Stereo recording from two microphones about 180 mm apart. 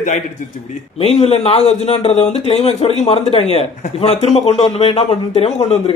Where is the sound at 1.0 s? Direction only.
35° left (ahead or behind).